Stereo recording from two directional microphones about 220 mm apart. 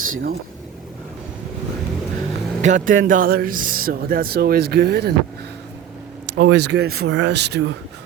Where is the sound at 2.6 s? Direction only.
35° right (ahead or behind).